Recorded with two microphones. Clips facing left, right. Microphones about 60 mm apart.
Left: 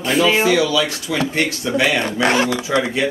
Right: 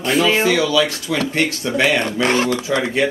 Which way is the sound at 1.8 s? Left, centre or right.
Centre.